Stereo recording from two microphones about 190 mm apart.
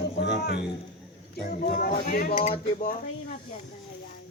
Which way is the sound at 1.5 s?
50° left (ahead or behind).